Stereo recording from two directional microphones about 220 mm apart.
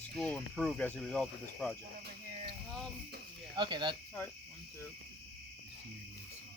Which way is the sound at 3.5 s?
20° right (ahead or behind).